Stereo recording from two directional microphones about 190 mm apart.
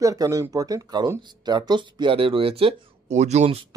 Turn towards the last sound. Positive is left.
turn(degrees=-35)  # may be behind; listen again after turning